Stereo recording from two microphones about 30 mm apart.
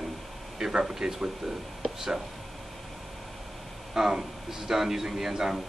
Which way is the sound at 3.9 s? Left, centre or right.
Centre.